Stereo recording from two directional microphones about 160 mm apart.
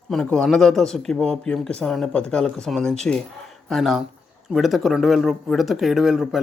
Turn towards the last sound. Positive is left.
turn(degrees=-5)  # may be behind; listen again after turning